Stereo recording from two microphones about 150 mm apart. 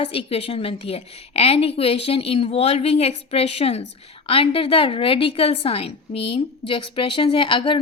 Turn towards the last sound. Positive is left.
turn(degrees=35)  # may be behind; listen again after turning